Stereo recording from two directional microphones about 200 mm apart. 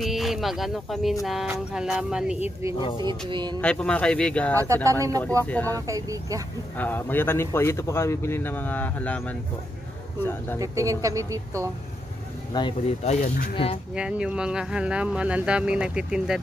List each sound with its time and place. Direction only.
0.0 s speech: centre (ahead or behind)
2.8 s speech: 25° left (ahead or behind)
3.1 s speech: 25° right (ahead or behind)
3.6 s speech: 5° left (ahead or behind)
4.8 s speech: 15° right (ahead or behind)
5.4 s speech: 10° left (ahead or behind)
5.9 s speech: 15° right (ahead or behind)
6.8 s speech: 10° left (ahead or behind)
10.6 s speech: 15° right (ahead or behind)
12.5 s speech: 25° left (ahead or behind)
13.9 s speech: 5° right (ahead or behind)